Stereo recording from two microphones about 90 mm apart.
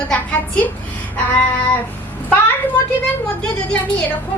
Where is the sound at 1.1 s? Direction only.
20° left (ahead or behind).